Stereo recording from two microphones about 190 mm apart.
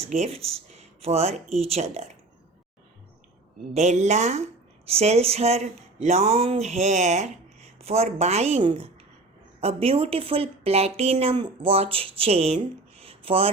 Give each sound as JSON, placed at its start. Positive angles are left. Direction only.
{"t": 0.0, "sound": "speech", "side_deg": -35}
{"t": 3.8, "sound": "speech", "side_deg": -35}